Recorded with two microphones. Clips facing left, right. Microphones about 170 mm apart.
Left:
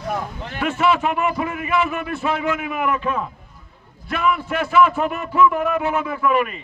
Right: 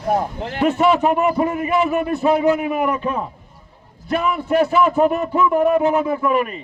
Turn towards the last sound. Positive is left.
turn(degrees=-40)  # may be behind; listen again after turning